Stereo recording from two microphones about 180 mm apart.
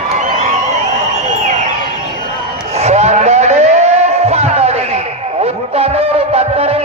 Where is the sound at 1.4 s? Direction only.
40° right (ahead or behind).